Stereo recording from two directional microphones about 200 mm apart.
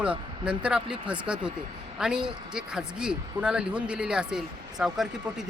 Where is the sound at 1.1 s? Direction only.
5° right (ahead or behind).